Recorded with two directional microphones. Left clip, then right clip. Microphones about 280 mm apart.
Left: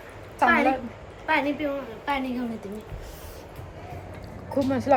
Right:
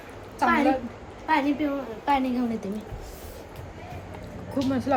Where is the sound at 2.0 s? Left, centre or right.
Right.